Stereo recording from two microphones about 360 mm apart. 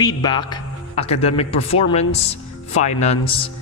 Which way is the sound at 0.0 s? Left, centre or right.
Centre.